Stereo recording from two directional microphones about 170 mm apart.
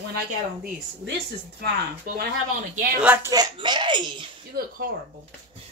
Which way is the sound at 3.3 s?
25° right (ahead or behind).